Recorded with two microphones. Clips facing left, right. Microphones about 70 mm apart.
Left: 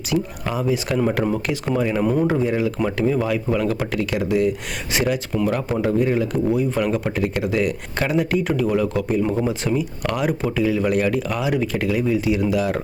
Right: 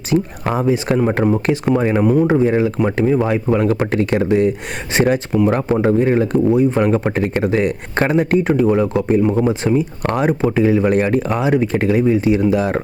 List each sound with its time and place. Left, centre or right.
0.1 s speech: centre
0.4 s speech: right